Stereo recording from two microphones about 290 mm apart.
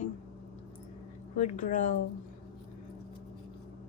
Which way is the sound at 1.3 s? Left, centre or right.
Left.